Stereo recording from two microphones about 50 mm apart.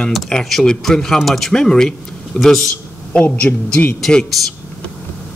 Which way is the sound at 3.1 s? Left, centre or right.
Left.